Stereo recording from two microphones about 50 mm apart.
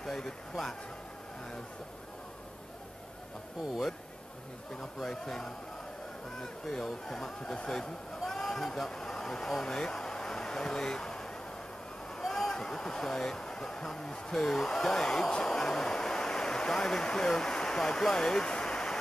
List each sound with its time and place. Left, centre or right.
0.0 s speech: centre
4.7 s speech: centre
8.2 s a sound: centre
12.1 s speech: centre